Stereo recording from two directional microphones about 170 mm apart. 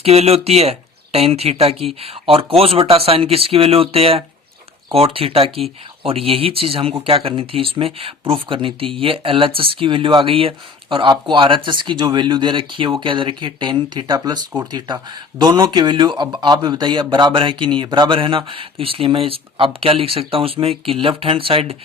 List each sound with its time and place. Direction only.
0.0 s speech: 35° right (ahead or behind)